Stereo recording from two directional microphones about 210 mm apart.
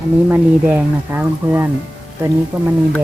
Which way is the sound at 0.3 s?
10° right (ahead or behind).